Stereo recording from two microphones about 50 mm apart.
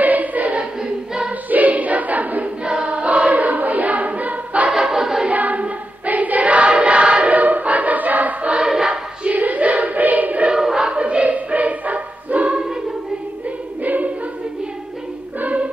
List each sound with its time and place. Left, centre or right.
0.0 s choir: right
0.7 s choir: centre
1.5 s choir: right
2.6 s choir: right
4.7 s choir: centre
5.3 s choir: right
8.5 s choir: centre
9.2 s choir: right
10.5 s choir: centre
11.0 s a sound: right
13.8 s choir: right
15.4 s music: right